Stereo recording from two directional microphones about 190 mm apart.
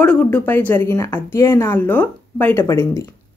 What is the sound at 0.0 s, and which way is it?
A woman's voice, 5° left (ahead or behind).